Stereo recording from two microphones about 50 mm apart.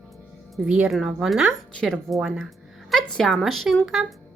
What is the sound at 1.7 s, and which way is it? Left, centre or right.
Speech, centre.